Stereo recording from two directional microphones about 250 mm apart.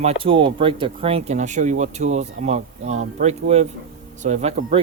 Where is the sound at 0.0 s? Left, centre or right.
Right.